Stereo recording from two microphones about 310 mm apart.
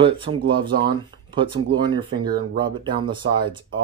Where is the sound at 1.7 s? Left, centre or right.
Centre.